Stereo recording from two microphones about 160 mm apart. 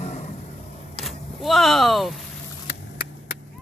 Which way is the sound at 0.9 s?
Centre (ahead or behind).